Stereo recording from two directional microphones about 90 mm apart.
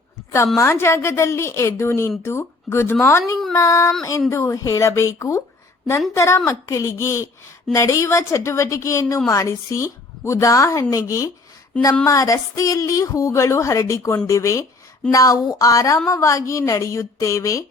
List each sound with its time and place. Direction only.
0.5 s a woman's voice: 30° left (ahead or behind)